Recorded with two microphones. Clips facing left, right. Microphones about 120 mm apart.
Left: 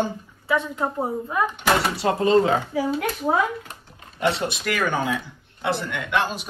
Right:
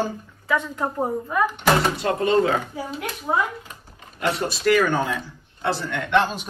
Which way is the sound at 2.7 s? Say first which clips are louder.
Left 8 dB; 90° left.